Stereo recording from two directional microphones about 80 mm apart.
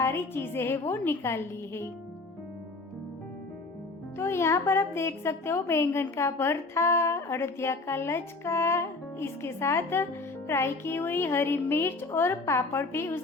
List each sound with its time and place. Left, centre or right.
0.0 s a woman's voice: left
4.2 s a woman's voice: left